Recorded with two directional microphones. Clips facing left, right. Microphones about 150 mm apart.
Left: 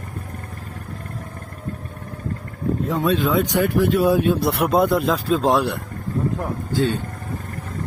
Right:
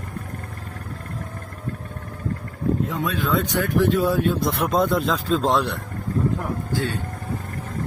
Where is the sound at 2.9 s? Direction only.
30° left (ahead or behind).